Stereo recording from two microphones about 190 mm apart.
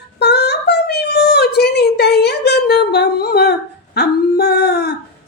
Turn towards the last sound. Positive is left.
turn(degrees=60)  # may be behind; listen again after turning